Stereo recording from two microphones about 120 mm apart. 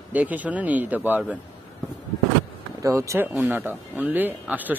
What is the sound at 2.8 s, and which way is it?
Speech, 25° right (ahead or behind).